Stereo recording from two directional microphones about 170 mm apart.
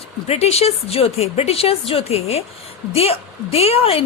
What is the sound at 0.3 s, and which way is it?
A woman's voice, 35° left (ahead or behind).